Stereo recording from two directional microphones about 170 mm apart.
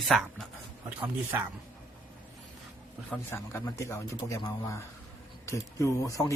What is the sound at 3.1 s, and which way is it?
Speech, 15° left (ahead or behind).